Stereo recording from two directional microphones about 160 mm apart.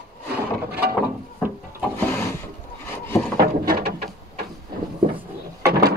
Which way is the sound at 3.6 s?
75° right (ahead or behind).